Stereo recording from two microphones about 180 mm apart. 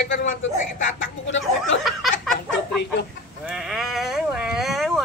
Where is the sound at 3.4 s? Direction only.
5° right (ahead or behind).